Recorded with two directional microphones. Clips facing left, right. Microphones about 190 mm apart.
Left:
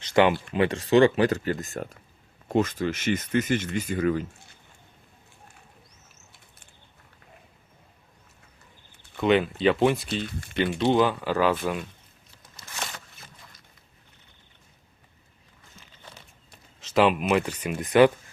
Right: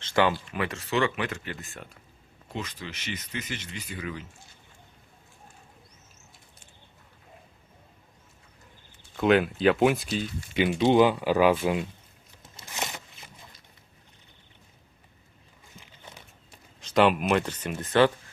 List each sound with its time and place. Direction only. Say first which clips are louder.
0.0 s speech: left 4 dB; 20° left (ahead or behind); by 4.3 s 45° left (ahead or behind)
9.1 s speech: even; centre (ahead or behind)
10.5 s speech: right 1 dB; 15° right (ahead or behind)
12.6 s a sound: right 2 dB; 20° right (ahead or behind)
15.7 s a sound: right 1 dB; 15° right (ahead or behind)
16.8 s speech: even; 5° left (ahead or behind)